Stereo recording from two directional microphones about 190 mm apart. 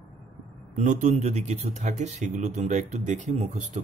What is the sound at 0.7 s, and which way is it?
Speech, 40° right (ahead or behind).